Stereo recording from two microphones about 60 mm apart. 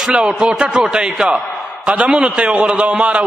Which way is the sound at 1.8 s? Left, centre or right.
Right.